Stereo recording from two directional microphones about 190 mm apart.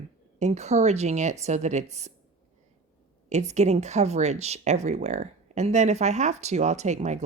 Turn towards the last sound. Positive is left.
turn(degrees=-40)  # may be behind; listen again after turning